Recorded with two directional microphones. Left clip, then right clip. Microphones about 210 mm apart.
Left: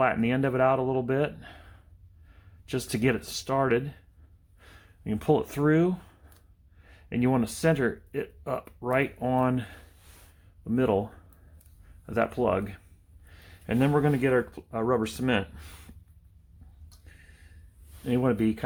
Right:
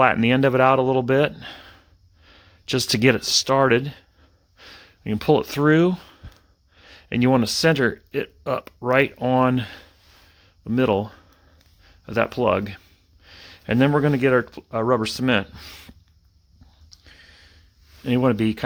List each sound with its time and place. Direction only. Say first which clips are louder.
0.0 s a man's voice: right 8 dB; 55° right (ahead or behind)
4.5 s a sound: right 11 dB; 50° right (ahead or behind)
6.7 s speech: right 7 dB; 55° right (ahead or behind)
18.0 s a man's voice: right 6 dB; 60° right (ahead or behind)